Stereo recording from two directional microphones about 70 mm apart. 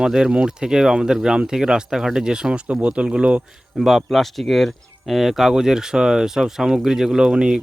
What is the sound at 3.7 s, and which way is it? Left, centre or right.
Speech, centre.